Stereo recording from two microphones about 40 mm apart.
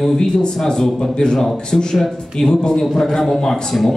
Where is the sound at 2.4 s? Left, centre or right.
Centre.